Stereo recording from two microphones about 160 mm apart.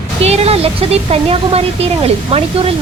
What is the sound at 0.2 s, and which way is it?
A woman's voice, 40° right (ahead or behind).